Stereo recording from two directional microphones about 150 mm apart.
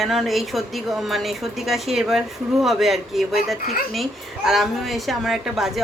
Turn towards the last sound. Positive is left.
turn(degrees=0)  # may be behind; listen again after turning